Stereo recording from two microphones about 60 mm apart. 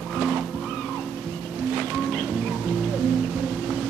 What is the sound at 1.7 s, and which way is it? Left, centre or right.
Music, centre.